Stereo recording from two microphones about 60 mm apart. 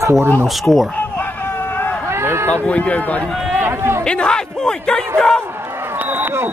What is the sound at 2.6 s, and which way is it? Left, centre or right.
Speech, left.